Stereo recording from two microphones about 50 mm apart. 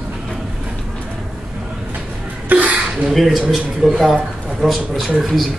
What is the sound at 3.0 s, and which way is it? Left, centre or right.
Speech, centre.